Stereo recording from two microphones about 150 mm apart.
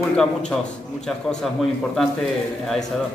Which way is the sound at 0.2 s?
5° left (ahead or behind).